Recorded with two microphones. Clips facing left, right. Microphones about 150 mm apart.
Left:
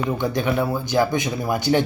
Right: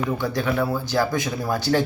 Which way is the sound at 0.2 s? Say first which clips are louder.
Left 2 dB; 20° left (ahead or behind).